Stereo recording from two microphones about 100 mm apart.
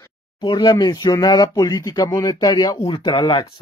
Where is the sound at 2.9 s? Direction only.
55° left (ahead or behind).